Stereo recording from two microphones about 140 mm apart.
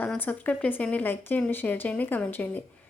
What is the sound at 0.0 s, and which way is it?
Speech, 10° left (ahead or behind).